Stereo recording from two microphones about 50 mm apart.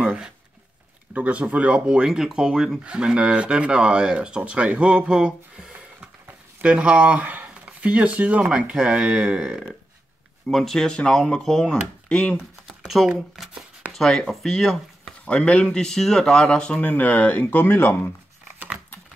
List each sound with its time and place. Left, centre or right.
1.1 s speech: right
2.0 s speech: centre
5.7 s a sound: right
7.8 s speech: right
10.5 s speech: centre
12.4 s computer keyboard: centre
13.4 s speech: centre
13.9 s speech: centre
15.2 s speech: left
16.8 s speech: left